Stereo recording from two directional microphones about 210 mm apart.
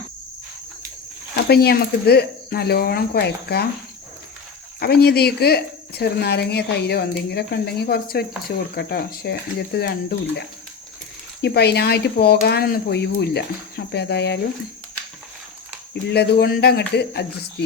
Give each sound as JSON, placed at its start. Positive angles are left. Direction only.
{"t": 1.5, "sound": "speech", "side_deg": 50}
{"t": 4.8, "sound": "speech", "side_deg": 50}
{"t": 11.4, "sound": "speech", "side_deg": 50}
{"t": 16.0, "sound": "speech", "side_deg": 50}